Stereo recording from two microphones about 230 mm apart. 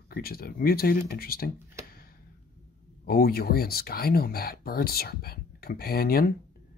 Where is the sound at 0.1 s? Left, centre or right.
Left.